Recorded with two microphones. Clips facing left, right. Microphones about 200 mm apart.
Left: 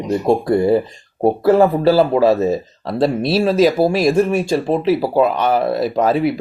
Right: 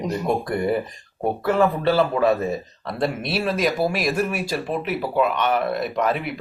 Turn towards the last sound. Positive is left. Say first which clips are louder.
# left 8 dB
turn(degrees=30)  # may be behind; listen again after turning